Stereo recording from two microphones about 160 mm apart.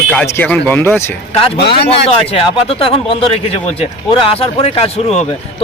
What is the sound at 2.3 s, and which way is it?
Speech, 35° left (ahead or behind).